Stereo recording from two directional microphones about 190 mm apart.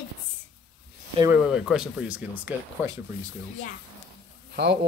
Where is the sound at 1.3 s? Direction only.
5° right (ahead or behind).